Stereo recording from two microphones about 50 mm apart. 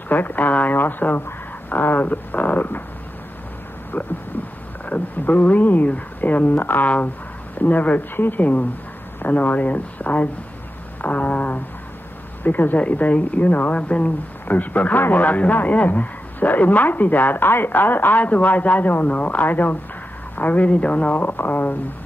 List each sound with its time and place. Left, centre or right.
0.1 s speech: left
3.9 s a man's voice: left